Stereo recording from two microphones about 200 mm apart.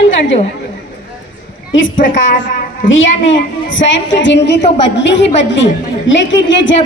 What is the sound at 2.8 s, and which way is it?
A woman's voice, 70° left (ahead or behind).